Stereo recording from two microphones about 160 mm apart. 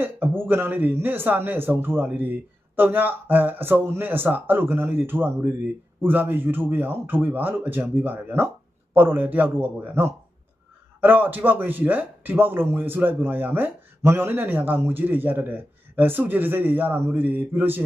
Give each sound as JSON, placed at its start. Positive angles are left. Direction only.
{"t": 0.0, "sound": "a man's voice", "side_deg": -15}